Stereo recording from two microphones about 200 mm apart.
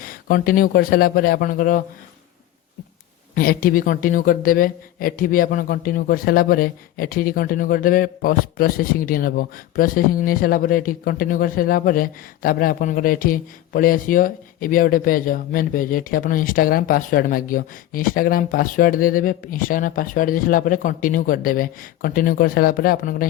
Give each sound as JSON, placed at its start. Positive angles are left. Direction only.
{"t": 0.0, "sound": "a woman's voice", "side_deg": 45}
{"t": 3.3, "sound": "a woman's voice", "side_deg": 45}